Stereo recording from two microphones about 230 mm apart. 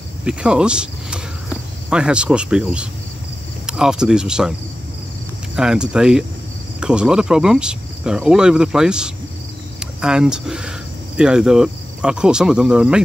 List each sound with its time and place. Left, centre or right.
0.2 s speech: centre
5.6 s speech: centre
9.8 s a sound: centre
11.1 s speech: centre